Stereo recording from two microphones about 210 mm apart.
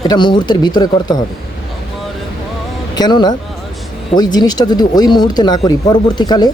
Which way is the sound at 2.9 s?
20° left (ahead or behind).